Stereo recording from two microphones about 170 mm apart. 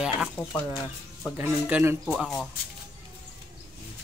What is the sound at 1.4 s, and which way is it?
Speech, 10° right (ahead or behind).